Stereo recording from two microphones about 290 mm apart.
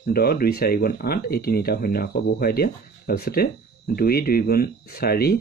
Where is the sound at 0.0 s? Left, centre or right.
Left.